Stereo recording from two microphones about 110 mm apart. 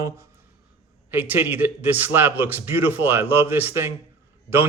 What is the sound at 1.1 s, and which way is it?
A man's voice, 20° right (ahead or behind).